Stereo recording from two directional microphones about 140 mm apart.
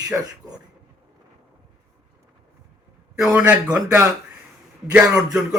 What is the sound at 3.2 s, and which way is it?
Speech, 5° right (ahead or behind).